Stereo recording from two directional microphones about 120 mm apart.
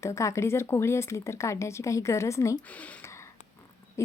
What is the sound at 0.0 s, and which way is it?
A woman's voice, 25° left (ahead or behind).